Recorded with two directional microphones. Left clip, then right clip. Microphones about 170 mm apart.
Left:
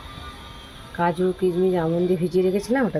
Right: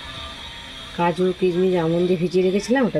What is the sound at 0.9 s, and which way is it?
Speech, 20° right (ahead or behind).